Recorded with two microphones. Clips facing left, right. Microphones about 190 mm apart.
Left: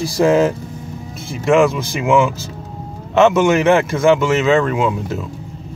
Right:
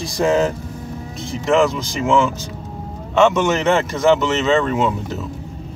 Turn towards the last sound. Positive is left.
turn(degrees=5)  # may be behind; listen again after turning